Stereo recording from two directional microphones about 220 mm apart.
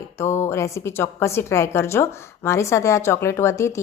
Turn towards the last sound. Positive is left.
turn(degrees=15)  # may be behind; listen again after turning